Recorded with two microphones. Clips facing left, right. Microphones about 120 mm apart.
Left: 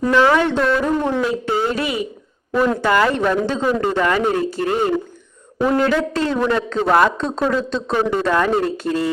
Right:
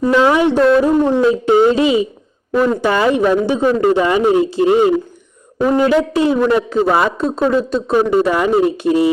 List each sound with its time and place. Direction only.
0.1 s speech: 15° right (ahead or behind)
2.5 s speech: 10° right (ahead or behind)